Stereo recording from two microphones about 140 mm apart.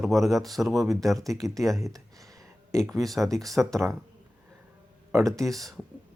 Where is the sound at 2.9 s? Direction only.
Centre (ahead or behind).